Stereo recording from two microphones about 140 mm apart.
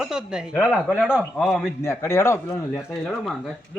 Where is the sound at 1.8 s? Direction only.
20° left (ahead or behind).